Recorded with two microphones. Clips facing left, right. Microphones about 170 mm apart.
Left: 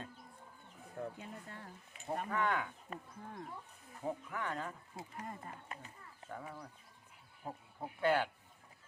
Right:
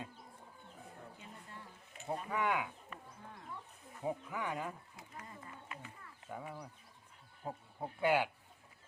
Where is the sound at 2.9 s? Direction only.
40° left (ahead or behind).